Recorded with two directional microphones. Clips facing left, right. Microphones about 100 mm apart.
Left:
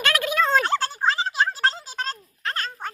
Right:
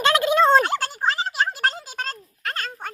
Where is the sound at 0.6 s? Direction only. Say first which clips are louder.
Even; 15° right (ahead or behind).